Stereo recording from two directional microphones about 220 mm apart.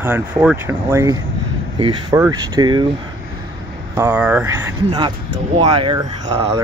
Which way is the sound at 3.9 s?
10° right (ahead or behind).